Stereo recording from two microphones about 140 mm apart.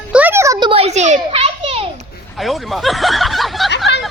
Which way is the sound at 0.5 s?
35° right (ahead or behind).